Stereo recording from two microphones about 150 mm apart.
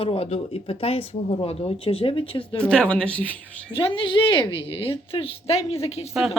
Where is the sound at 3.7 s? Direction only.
35° left (ahead or behind).